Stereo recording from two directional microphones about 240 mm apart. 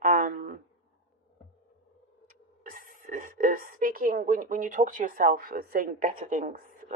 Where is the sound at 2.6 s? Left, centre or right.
Right.